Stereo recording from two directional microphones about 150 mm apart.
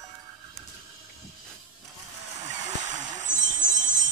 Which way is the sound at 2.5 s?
50° right (ahead or behind).